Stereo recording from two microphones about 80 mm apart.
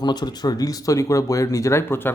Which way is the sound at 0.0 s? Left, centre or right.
Left.